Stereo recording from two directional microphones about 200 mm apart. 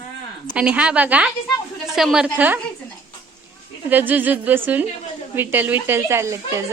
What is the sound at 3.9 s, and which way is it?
Speech, 10° right (ahead or behind).